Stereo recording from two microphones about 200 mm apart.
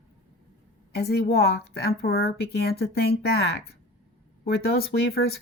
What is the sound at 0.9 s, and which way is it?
A woman's voice, 50° left (ahead or behind).